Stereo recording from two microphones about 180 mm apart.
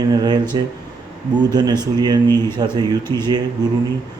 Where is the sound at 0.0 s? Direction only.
20° right (ahead or behind).